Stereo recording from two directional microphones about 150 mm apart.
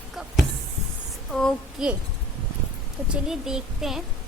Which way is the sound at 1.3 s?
5° left (ahead or behind).